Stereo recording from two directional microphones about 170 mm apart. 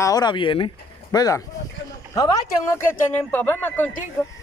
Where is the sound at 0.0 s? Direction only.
20° left (ahead or behind).